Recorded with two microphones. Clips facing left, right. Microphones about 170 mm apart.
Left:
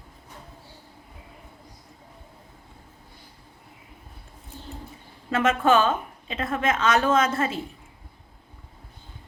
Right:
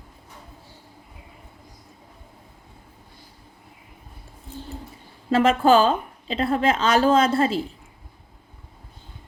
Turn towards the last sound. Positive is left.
turn(degrees=-30)  # may be behind; listen again after turning